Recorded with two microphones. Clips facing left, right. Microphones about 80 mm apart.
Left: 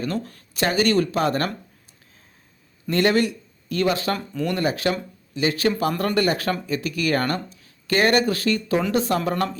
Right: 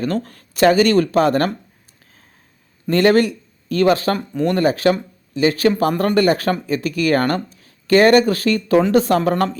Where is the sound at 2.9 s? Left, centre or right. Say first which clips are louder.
Right 6 dB; right.